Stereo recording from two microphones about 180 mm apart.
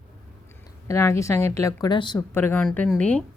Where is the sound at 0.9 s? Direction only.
15° left (ahead or behind).